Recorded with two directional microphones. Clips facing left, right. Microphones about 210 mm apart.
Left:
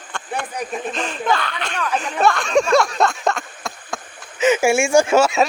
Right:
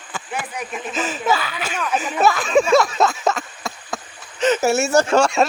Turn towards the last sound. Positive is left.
turn(degrees=5)  # may be behind; listen again after turning